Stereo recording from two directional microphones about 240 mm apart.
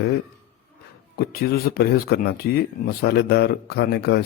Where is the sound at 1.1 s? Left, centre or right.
Left.